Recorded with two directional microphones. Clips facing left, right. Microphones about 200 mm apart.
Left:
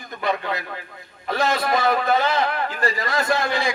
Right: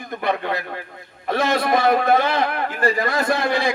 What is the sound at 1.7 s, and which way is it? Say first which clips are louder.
A man's voice: right 5 dB; 55° right (ahead or behind).